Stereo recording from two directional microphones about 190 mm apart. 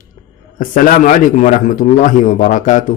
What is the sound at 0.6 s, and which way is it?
Speech, 45° left (ahead or behind).